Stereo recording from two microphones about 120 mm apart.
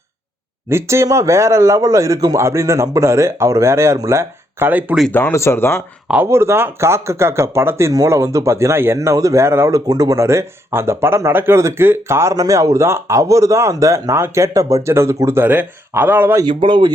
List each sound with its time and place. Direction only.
0.7 s speech: 20° right (ahead or behind)
5.1 s speech: 20° left (ahead or behind)
6.1 s speech: 15° right (ahead or behind)
16.6 s speech: 40° right (ahead or behind)